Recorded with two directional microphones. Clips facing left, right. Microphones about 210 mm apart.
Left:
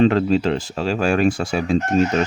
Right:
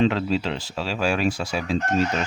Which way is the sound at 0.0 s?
45° left (ahead or behind).